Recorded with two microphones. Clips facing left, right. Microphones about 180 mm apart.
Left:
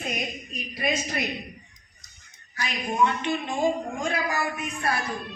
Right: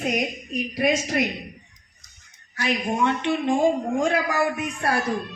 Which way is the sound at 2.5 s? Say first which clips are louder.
Right 5 dB; 75° right (ahead or behind).